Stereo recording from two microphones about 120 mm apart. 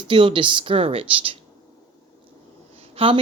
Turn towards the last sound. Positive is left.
turn(degrees=-50)  # may be behind; listen again after turning